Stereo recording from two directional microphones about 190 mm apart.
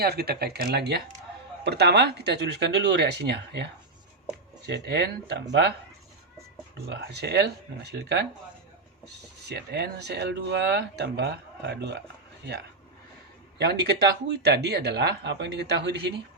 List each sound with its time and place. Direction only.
0.0 s speech: 55° right (ahead or behind)
6.8 s speech: 60° right (ahead or behind)
9.5 s speech: 60° right (ahead or behind)
13.6 s speech: 60° right (ahead or behind)